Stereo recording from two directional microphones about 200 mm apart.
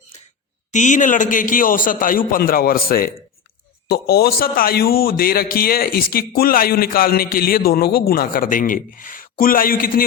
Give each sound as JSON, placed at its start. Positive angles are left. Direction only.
{"t": 0.7, "sound": "a man's voice", "side_deg": 40}